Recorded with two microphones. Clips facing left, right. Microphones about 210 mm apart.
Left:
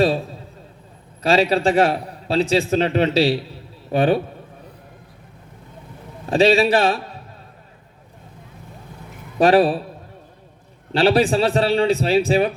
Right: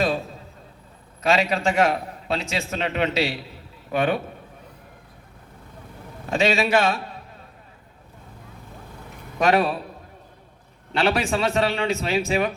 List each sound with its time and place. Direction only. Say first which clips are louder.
1.2 s a man's voice: left 5 dB; 35° left (ahead or behind)
6.3 s a man's voice: left 5 dB; 35° left (ahead or behind)
9.4 s a man's voice: left 6 dB; 35° left (ahead or behind)
10.9 s a man's voice: left 6 dB; 35° left (ahead or behind)